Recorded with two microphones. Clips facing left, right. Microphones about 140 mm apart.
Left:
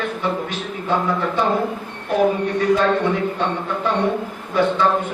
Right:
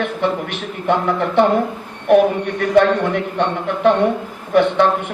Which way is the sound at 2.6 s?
65° right (ahead or behind).